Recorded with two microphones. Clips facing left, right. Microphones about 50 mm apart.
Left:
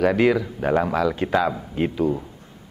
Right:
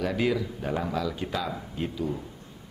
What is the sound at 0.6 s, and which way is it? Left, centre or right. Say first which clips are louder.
Speech: left 9 dB; left.